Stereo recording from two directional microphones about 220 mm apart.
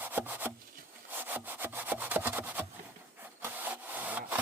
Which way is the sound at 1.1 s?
10° right (ahead or behind).